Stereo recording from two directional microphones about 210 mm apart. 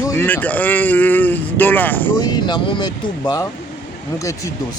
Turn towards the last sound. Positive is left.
turn(degrees=20)  # may be behind; listen again after turning